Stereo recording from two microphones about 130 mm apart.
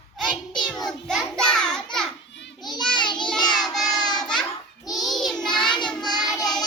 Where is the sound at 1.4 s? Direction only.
5° left (ahead or behind).